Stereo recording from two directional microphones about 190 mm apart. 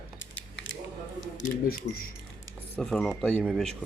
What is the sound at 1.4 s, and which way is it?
Speech, 50° left (ahead or behind).